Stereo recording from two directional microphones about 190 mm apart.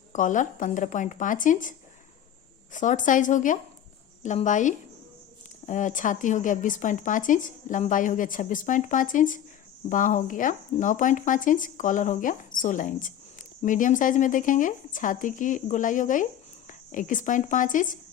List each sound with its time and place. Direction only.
0.1 s speech: 40° left (ahead or behind)
2.7 s speech: 40° left (ahead or behind)